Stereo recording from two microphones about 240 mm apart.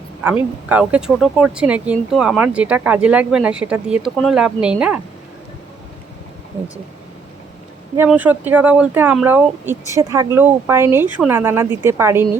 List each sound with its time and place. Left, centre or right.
0.2 s speech: centre
7.9 s speech: centre